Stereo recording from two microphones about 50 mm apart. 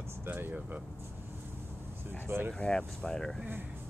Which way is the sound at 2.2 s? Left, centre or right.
Right.